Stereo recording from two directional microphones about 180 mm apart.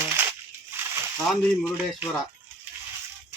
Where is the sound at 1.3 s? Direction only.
10° right (ahead or behind).